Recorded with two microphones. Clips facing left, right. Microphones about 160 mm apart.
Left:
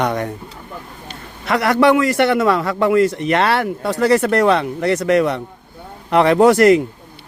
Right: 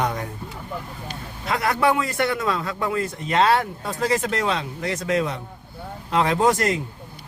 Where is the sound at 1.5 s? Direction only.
75° left (ahead or behind).